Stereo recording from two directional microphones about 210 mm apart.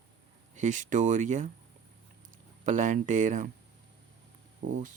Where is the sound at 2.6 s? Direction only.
35° right (ahead or behind).